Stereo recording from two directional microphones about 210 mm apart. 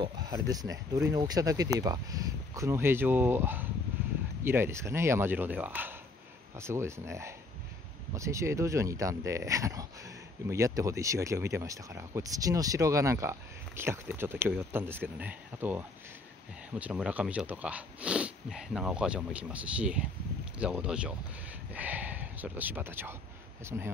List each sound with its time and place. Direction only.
0.0 s speech: 20° right (ahead or behind)